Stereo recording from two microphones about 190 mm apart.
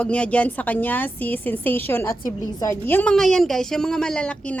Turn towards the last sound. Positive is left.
turn(degrees=5)  # may be behind; listen again after turning